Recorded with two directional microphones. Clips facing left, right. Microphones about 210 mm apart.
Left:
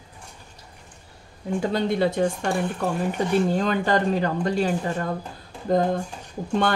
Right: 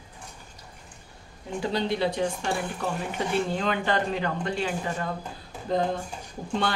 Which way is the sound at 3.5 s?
40° left (ahead or behind).